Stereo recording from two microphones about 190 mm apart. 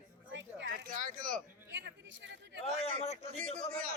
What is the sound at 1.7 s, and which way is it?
Speech, 70° right (ahead or behind).